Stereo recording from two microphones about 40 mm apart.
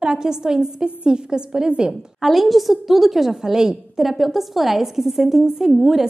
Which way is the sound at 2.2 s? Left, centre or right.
Centre.